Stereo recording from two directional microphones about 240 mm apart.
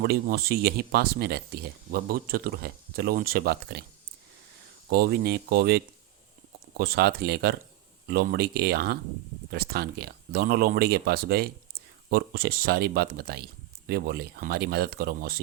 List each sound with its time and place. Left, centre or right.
0.0 s speech: right
4.9 s speech: right